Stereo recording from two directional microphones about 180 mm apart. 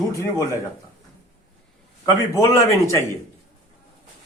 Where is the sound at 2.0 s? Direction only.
20° left (ahead or behind).